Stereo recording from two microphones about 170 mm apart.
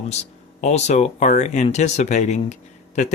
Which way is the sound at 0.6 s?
40° left (ahead or behind).